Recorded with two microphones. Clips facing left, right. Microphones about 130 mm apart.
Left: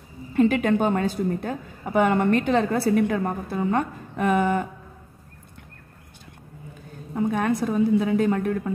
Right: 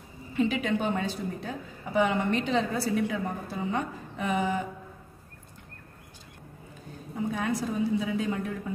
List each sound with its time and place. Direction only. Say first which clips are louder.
0.3 s a woman's voice: left 7 dB; 50° left (ahead or behind)
7.2 s a woman's voice: left 7 dB; 60° left (ahead or behind)